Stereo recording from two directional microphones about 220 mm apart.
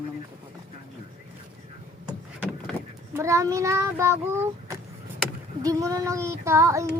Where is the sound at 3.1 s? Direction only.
15° right (ahead or behind).